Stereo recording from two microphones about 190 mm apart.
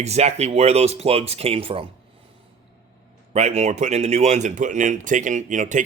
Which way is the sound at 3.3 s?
35° right (ahead or behind).